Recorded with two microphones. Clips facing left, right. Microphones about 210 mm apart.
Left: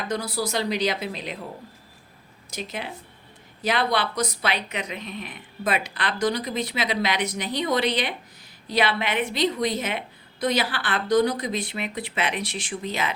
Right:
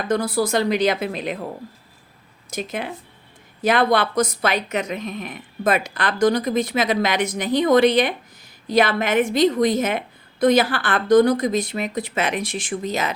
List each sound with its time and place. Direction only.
0.1 s a woman's voice: 50° right (ahead or behind)
2.5 s a woman's voice: 50° right (ahead or behind)